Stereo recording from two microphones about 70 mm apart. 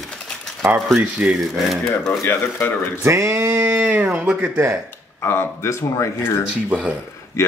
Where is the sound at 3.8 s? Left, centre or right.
Right.